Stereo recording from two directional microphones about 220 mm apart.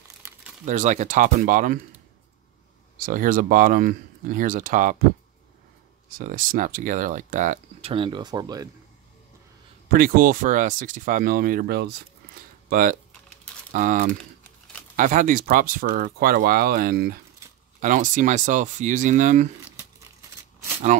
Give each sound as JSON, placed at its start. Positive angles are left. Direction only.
{"t": 0.2, "sound": "crumpling", "side_deg": -5}
{"t": 0.7, "sound": "speech", "side_deg": -35}
{"t": 3.0, "sound": "speech", "side_deg": -40}
{"t": 6.0, "sound": "speech", "side_deg": -40}
{"t": 9.9, "sound": "speech", "side_deg": -40}
{"t": 20.9, "sound": "speech", "side_deg": -35}